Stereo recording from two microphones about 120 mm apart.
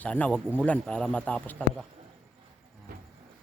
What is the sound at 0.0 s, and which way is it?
Speech, 10° left (ahead or behind).